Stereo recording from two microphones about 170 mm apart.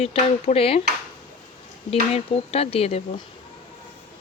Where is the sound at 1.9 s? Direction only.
35° left (ahead or behind).